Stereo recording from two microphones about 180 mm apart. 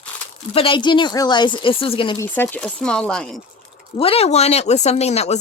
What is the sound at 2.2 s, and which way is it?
Speech, 10° left (ahead or behind).